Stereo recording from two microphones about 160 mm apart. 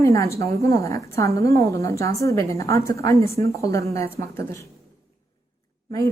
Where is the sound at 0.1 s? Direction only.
20° left (ahead or behind).